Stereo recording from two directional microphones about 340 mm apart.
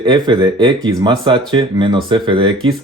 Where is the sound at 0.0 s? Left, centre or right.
Centre.